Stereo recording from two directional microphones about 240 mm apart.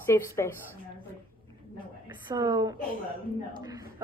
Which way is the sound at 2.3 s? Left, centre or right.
Centre.